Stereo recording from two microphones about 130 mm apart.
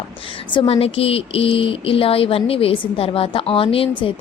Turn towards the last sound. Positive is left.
turn(degrees=45)  # may be behind; listen again after turning